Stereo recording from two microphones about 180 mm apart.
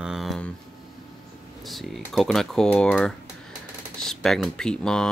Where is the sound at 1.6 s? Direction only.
Centre (ahead or behind).